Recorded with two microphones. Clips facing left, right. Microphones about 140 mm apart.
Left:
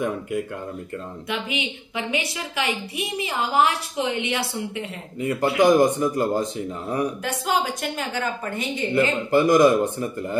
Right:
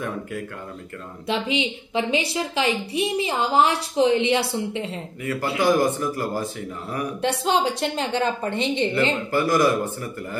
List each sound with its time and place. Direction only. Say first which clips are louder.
1.3 s a woman's voice: right 5 dB; 30° right (ahead or behind)
5.2 s speech: left 4 dB; 20° left (ahead or behind)
7.2 s a woman's voice: right 3 dB; 30° right (ahead or behind)
8.9 s speech: left 3 dB; 20° left (ahead or behind)